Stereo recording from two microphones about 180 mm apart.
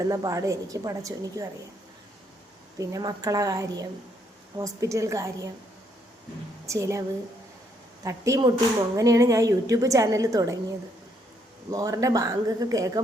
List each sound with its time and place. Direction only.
0.1 s a woman's voice: 20° right (ahead or behind)
2.7 s a woman's voice: 20° right (ahead or behind)
6.7 s a woman's voice: 15° right (ahead or behind)
8.0 s a woman's voice: 15° right (ahead or behind)
11.7 s a woman's voice: 20° right (ahead or behind)